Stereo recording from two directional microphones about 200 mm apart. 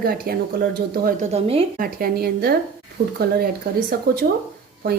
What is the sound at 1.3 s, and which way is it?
Speech, 30° right (ahead or behind).